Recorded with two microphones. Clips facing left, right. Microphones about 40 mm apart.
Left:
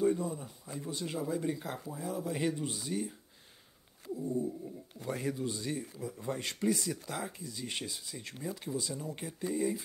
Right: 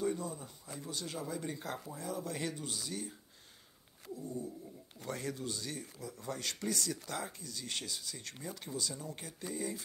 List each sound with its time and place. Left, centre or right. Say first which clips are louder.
0.0 s speech: left 6 dB; centre
1.2 s speech: left 8 dB; centre
8.7 s speech: left 3 dB; centre